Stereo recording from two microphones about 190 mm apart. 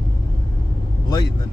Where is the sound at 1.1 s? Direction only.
20° left (ahead or behind).